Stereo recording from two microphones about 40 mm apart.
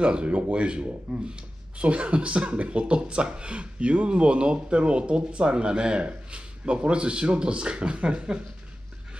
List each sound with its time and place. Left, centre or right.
0.0 s speech: right